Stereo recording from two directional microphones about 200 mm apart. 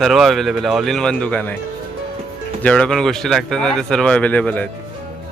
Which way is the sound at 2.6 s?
5° left (ahead or behind).